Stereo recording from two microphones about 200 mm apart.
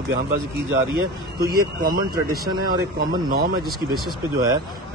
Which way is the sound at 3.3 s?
50° right (ahead or behind).